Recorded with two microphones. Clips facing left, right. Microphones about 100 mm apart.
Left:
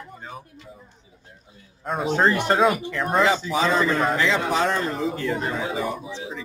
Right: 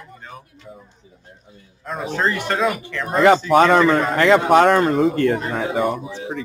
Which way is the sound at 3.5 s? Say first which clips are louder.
Right 8 dB; 60° right (ahead or behind).